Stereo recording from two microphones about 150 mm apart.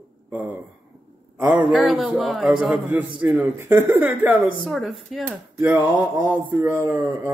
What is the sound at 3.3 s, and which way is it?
Speech, 15° right (ahead or behind).